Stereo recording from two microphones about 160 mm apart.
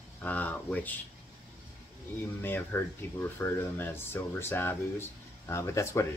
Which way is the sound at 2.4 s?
15° left (ahead or behind).